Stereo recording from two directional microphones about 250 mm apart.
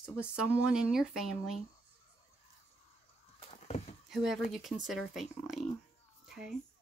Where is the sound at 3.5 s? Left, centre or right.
Left.